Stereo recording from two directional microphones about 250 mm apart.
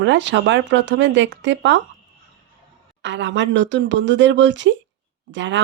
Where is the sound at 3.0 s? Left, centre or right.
Right.